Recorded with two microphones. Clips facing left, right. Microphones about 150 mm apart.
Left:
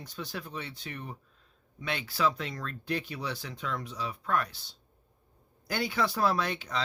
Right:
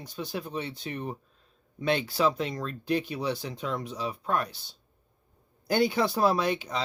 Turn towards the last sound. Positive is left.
turn(degrees=-15)  # may be behind; listen again after turning